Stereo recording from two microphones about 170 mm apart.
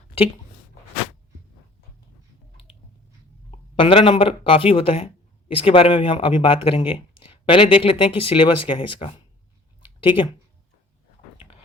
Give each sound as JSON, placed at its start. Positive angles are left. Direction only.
{"t": 3.8, "sound": "speech", "side_deg": 30}